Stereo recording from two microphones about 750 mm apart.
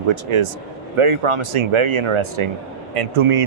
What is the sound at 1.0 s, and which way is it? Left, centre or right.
Speech, right.